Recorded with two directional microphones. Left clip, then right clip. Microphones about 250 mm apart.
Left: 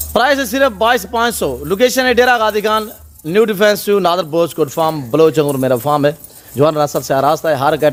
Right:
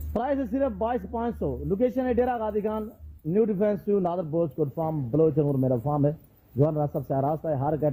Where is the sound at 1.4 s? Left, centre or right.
Left.